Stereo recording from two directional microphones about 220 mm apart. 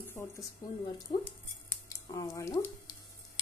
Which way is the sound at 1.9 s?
15° left (ahead or behind).